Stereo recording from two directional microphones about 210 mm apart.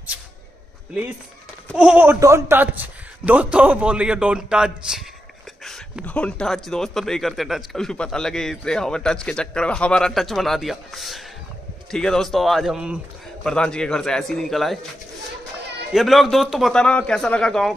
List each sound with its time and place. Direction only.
1.8 s a man's voice: 5° right (ahead or behind)
15.9 s a man's voice: centre (ahead or behind)